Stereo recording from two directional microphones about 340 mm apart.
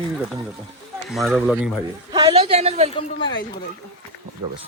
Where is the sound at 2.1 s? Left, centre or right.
Centre.